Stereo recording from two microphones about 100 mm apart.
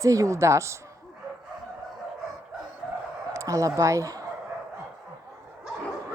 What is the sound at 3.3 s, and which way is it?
Speech, 30° right (ahead or behind).